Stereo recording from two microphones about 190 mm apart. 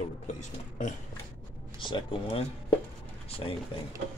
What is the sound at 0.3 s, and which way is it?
Speech, 40° left (ahead or behind).